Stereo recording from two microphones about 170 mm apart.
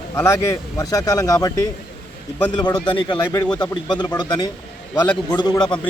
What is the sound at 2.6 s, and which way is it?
Speech, 25° left (ahead or behind).